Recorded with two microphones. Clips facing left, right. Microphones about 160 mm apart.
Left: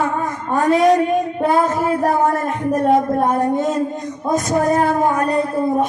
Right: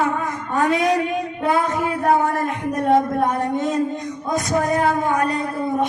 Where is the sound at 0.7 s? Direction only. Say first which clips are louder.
Left 9 dB; 35° left (ahead or behind).